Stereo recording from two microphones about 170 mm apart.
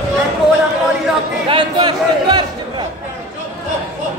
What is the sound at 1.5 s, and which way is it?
Speech, 30° right (ahead or behind).